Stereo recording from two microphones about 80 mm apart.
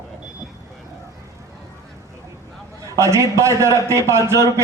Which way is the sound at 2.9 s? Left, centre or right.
Right.